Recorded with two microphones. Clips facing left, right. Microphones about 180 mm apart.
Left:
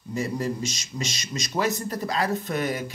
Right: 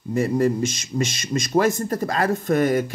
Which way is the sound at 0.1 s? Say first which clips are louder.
Right 8 dB; 55° right (ahead or behind).